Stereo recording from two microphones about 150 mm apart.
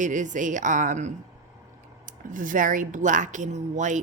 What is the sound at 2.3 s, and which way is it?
A woman's voice, 60° right (ahead or behind).